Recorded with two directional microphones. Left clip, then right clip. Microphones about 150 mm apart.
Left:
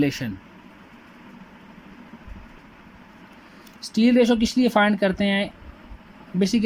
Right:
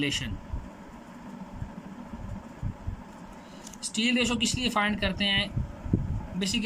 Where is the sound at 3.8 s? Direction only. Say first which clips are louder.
Left 8 dB; 45° left (ahead or behind).